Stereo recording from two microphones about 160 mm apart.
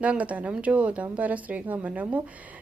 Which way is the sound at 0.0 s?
10° right (ahead or behind).